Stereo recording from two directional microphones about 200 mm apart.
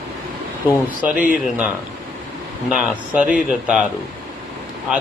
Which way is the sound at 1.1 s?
45° left (ahead or behind).